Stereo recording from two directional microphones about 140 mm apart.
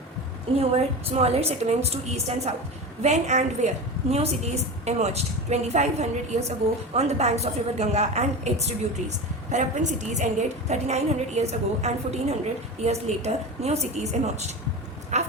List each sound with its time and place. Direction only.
1.2 s a woman's voice: 50° right (ahead or behind)
15.1 s dog: 55° right (ahead or behind)